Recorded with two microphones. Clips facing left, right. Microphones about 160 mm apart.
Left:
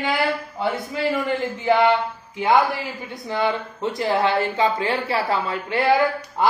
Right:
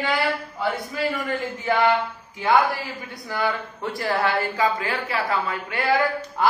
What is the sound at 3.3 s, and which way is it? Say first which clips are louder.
A man's voice: left 3 dB; 25° left (ahead or behind).